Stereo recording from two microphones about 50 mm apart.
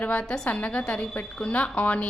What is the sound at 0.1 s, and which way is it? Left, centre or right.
Speech, centre.